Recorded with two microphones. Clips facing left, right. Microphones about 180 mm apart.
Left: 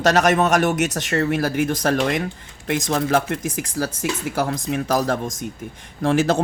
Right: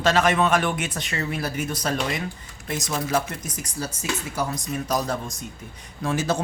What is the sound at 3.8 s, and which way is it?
Speech, 90° left.